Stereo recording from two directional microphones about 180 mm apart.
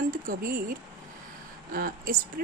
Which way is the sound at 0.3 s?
55° right (ahead or behind).